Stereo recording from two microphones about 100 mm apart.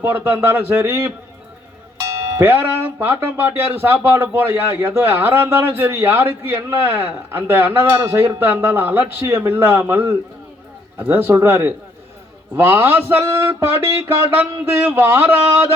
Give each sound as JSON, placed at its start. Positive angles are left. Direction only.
{"t": 0.0, "sound": "speech", "side_deg": -20}